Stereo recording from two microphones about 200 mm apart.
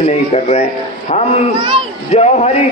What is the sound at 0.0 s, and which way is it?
Speech, 35° left (ahead or behind).